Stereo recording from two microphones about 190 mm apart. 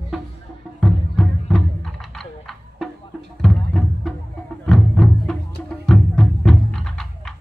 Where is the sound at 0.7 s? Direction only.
Centre (ahead or behind).